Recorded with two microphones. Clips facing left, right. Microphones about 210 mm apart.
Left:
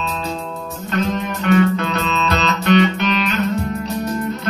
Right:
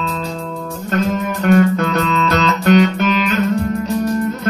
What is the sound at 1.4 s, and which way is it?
Music, 45° right (ahead or behind).